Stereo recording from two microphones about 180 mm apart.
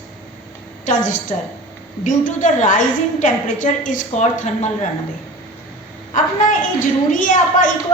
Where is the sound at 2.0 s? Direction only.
45° left (ahead or behind).